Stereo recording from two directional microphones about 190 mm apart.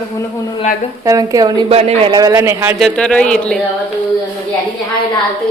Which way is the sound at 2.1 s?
15° right (ahead or behind).